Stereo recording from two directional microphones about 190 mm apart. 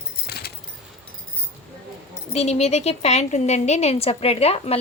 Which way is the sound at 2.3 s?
35° left (ahead or behind).